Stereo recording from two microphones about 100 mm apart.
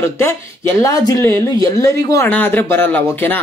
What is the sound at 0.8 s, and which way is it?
Speech, 35° left (ahead or behind).